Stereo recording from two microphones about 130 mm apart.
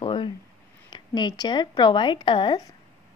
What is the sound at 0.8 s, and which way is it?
A woman's voice, 35° left (ahead or behind).